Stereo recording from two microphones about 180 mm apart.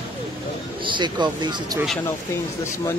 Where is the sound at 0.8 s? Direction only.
25° right (ahead or behind).